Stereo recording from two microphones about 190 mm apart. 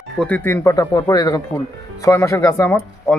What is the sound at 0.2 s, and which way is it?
Speech, 10° left (ahead or behind).